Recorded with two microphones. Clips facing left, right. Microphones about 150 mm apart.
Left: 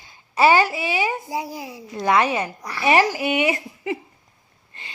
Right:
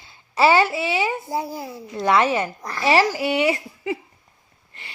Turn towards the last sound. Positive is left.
turn(degrees=20)  # may be behind; listen again after turning